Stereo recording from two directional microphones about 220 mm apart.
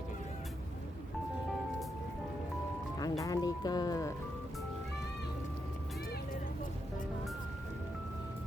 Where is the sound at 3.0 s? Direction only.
15° left (ahead or behind).